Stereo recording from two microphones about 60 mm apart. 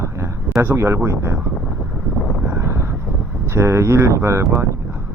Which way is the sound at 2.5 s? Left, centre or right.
Right.